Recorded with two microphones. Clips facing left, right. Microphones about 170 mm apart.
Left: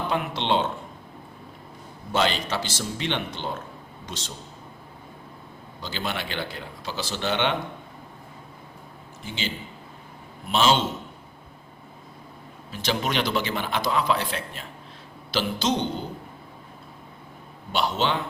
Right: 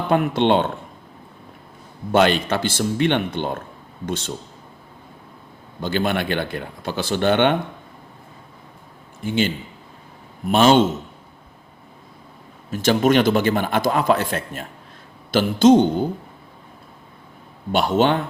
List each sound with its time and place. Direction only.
0.1 s a man's voice: 55° right (ahead or behind)
2.1 s speech: 55° right (ahead or behind)
5.8 s speech: 55° right (ahead or behind)
9.2 s speech: 55° right (ahead or behind)
10.5 s a man's voice: 55° right (ahead or behind)
12.7 s a man's voice: 50° right (ahead or behind)
17.7 s a man's voice: 50° right (ahead or behind)